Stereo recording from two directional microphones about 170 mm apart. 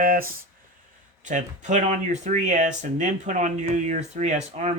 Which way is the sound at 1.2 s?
45° right (ahead or behind).